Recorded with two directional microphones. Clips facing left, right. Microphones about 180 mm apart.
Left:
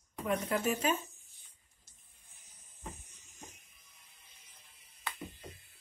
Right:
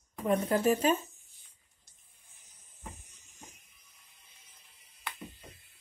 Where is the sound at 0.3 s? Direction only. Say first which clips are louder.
Right 6 dB; 35° right (ahead or behind).